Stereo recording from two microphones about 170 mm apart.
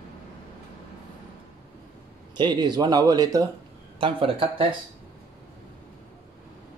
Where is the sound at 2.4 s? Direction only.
25° right (ahead or behind).